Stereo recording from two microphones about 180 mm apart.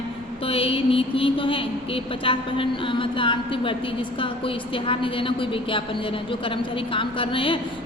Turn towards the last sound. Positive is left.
turn(degrees=30)  # may be behind; listen again after turning